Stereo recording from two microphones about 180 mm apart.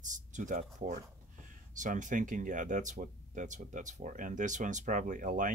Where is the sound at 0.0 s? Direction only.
45° right (ahead or behind).